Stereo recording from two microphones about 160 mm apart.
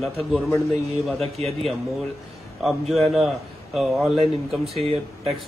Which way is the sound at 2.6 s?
Centre (ahead or behind).